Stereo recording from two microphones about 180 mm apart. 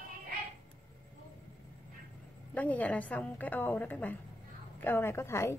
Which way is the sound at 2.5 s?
10° left (ahead or behind).